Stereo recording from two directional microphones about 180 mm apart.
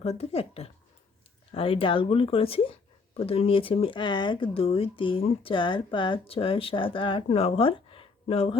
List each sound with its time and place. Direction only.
0.0 s speech: 35° left (ahead or behind)